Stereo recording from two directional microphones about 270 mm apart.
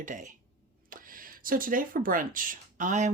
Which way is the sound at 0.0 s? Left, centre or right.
Right.